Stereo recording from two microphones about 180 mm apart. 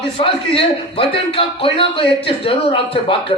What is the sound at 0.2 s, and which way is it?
A man's voice, 30° left (ahead or behind).